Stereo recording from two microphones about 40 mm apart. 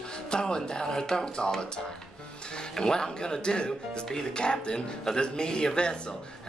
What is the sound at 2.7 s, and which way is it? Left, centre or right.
Speech, centre.